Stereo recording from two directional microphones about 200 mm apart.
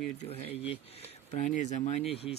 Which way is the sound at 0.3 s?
30° left (ahead or behind).